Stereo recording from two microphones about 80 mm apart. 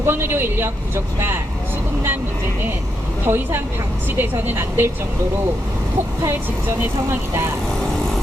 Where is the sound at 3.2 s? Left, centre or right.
Right.